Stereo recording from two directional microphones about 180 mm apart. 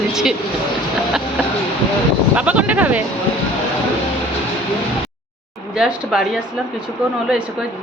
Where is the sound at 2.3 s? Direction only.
5° right (ahead or behind).